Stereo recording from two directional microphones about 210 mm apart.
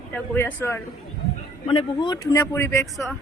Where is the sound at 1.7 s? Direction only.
20° left (ahead or behind).